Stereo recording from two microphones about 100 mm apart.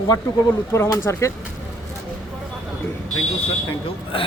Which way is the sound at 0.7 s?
25° left (ahead or behind).